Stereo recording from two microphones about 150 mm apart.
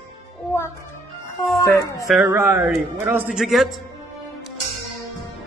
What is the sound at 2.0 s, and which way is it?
Speech, 5° right (ahead or behind).